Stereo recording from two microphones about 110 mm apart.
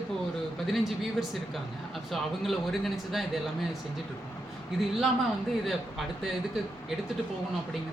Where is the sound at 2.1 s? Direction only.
Centre (ahead or behind).